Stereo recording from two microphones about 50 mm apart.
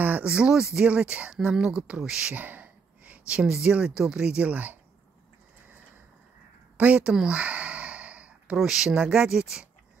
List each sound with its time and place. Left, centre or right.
0.2 s speech: centre
0.8 s speech: right
2.3 s a sound: right
3.8 s speech: centre
6.8 s speech: right
7.1 s a sound: centre
8.6 s speech: centre